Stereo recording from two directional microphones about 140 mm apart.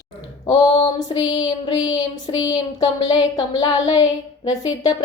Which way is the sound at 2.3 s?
30° left (ahead or behind).